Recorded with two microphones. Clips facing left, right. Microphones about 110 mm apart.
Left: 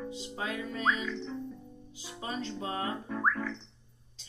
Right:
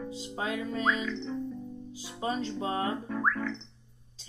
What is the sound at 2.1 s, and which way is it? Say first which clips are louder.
Speech: right 5 dB; 30° right (ahead or behind).